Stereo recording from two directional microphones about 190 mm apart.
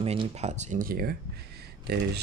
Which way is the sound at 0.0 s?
30° right (ahead or behind).